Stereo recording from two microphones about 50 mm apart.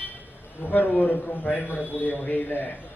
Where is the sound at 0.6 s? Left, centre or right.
Left.